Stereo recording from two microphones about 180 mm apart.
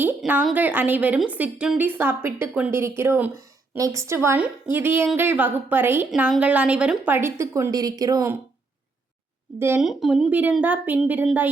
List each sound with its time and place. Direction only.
0.0 s a woman's voice: 10° right (ahead or behind)
9.6 s a woman's voice: 10° right (ahead or behind)